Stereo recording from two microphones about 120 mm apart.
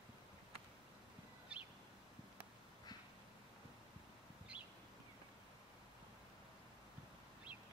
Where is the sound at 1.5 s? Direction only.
10° right (ahead or behind).